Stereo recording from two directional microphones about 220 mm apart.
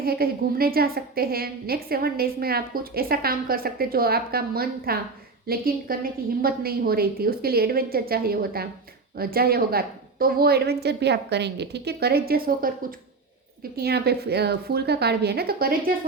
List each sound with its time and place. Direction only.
0.0 s a woman's voice: 45° right (ahead or behind)